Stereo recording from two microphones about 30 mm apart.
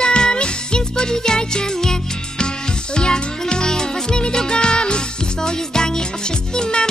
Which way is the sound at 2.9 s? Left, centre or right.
Left.